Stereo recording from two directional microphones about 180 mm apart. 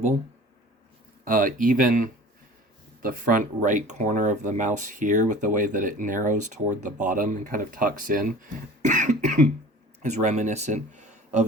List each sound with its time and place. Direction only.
1.2 s speech: 50° right (ahead or behind)